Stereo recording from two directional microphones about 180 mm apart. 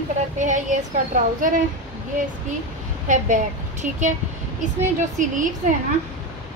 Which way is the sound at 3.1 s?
45° right (ahead or behind).